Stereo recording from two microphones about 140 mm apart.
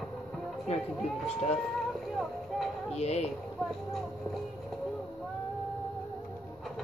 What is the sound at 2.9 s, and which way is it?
Speech, 50° left (ahead or behind).